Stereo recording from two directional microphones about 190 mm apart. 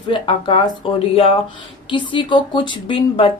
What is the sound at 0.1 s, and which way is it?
A woman's voice, 25° left (ahead or behind).